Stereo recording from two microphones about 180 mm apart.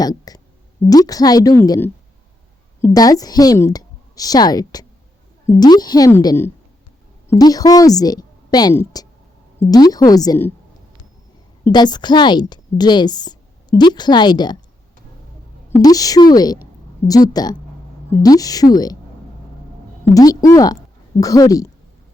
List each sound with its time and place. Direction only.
0.0 s a sound: 20° left (ahead or behind)
0.9 s a woman's voice: 20° left (ahead or behind)
11.6 s a woman's voice: 25° left (ahead or behind)
15.8 s a woman's voice: 20° left (ahead or behind)
20.1 s a woman's voice: 20° left (ahead or behind)